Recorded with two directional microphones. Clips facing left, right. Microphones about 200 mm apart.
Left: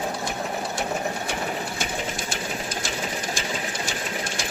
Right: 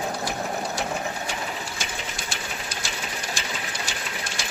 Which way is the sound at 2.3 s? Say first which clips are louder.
Left 4 dB; 50° left (ahead or behind).